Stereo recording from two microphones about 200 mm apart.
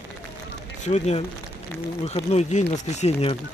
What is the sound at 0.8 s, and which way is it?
Speech, 35° left (ahead or behind).